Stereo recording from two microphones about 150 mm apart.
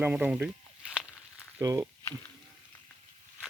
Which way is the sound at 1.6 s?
20° right (ahead or behind).